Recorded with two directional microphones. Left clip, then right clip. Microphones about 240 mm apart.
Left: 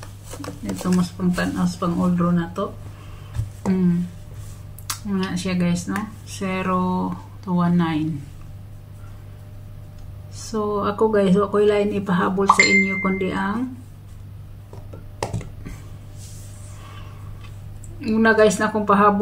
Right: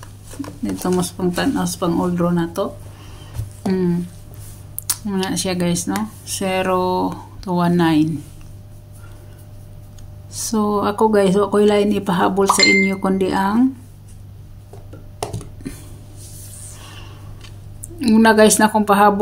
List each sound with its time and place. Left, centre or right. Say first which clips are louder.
0.8 s speech: right 5 dB; right
4.8 s speech: right 4 dB; right
10.3 s speech: right 4 dB; right
18.0 s speech: right 4 dB; right